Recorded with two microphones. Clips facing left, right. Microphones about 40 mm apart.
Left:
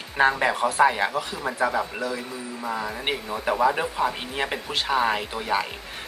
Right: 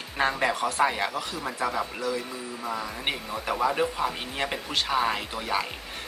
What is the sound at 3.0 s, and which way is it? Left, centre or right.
Speech, centre.